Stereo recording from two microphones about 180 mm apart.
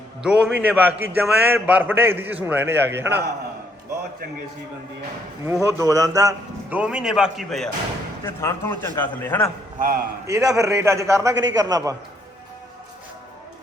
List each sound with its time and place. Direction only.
0.2 s a man's voice: 5° right (ahead or behind)
5.6 s a man's voice: 15° right (ahead or behind)
6.7 s a man's voice: 5° right (ahead or behind)
8.2 s speech: 15° left (ahead or behind)
9.7 s a man's voice: 50° right (ahead or behind)
10.2 s a man's voice: 20° right (ahead or behind)